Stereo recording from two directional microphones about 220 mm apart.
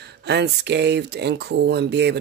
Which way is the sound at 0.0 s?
50° right (ahead or behind).